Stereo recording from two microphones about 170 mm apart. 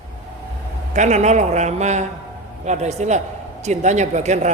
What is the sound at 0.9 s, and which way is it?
A man's voice, 45° right (ahead or behind).